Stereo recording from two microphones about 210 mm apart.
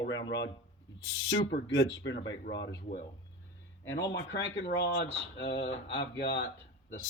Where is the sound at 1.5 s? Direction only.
55° left (ahead or behind).